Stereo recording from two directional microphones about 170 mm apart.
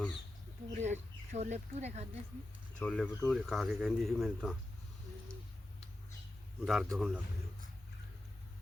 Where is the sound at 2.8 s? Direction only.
5° left (ahead or behind).